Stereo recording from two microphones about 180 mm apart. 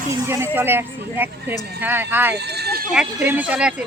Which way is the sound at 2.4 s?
65° right (ahead or behind).